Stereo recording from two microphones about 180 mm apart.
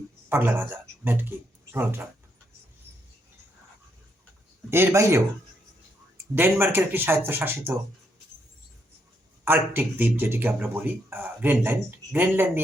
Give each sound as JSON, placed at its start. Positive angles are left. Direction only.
{"t": 0.3, "sound": "speech", "side_deg": -10}
{"t": 4.7, "sound": "speech", "side_deg": -15}
{"t": 6.3, "sound": "speech", "side_deg": -10}
{"t": 9.4, "sound": "speech", "side_deg": -10}